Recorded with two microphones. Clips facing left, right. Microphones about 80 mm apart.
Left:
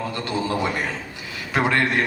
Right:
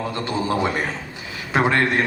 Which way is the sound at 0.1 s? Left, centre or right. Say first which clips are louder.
Right 2 dB; centre.